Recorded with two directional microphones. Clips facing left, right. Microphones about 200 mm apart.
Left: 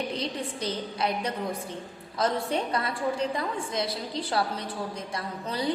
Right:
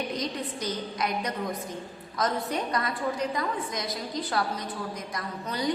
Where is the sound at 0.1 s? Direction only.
30° left (ahead or behind).